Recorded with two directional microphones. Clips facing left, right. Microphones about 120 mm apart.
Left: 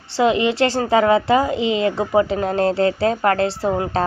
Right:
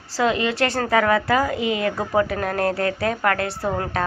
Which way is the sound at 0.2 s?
20° left (ahead or behind).